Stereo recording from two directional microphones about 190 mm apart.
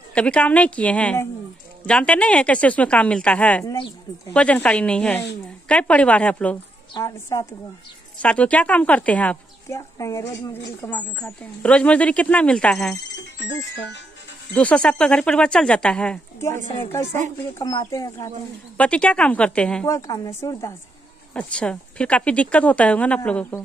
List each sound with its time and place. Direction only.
0.1 s a woman's voice: 5° left (ahead or behind)
6.9 s a woman's voice: 20° left (ahead or behind)
13.7 s speech: 65° left (ahead or behind)
14.5 s a woman's voice: 5° left (ahead or behind)
18.8 s a woman's voice: 5° left (ahead or behind)